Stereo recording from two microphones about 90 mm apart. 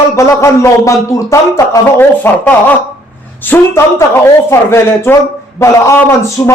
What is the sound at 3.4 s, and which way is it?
A man's voice, 20° left (ahead or behind).